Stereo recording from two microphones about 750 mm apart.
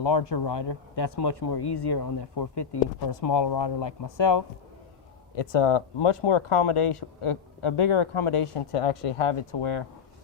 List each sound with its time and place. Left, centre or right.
0.0 s speech: left